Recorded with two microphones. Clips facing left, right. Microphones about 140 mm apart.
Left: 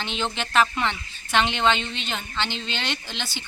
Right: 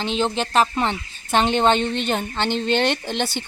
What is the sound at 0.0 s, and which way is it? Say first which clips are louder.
Speech: right 7 dB; 35° right (ahead or behind).